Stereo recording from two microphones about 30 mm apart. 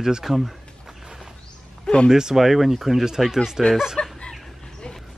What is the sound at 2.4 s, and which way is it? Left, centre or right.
Speech, centre.